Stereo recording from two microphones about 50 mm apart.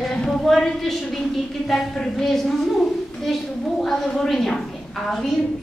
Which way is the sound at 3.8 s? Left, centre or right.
Centre.